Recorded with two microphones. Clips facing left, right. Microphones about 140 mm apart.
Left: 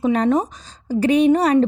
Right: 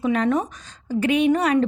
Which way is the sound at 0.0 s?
35° left (ahead or behind).